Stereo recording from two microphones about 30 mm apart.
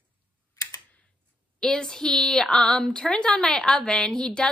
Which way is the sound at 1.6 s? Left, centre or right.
Left.